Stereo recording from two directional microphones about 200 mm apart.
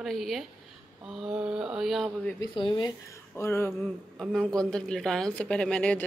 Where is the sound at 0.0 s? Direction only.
Centre (ahead or behind).